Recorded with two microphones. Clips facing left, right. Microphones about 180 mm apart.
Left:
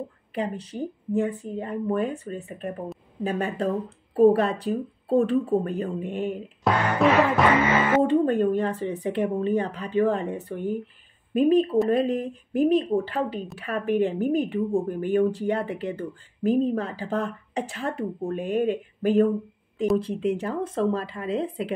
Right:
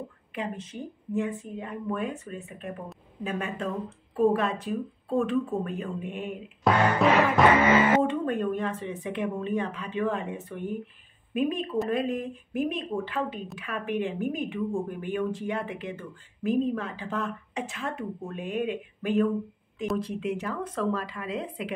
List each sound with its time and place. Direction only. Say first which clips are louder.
0.3 s speech: left 5 dB; 35° left (ahead or behind)
6.7 s music: left 1 dB; centre (ahead or behind)
8.0 s speech: left 6 dB; 35° left (ahead or behind)